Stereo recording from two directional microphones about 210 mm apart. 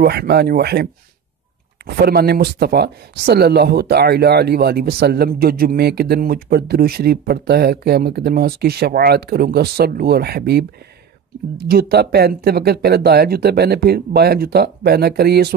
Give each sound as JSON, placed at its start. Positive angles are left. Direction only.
{"t": 0.0, "sound": "speech", "side_deg": -50}
{"t": 2.0, "sound": "speech", "side_deg": -50}
{"t": 11.6, "sound": "speech", "side_deg": -45}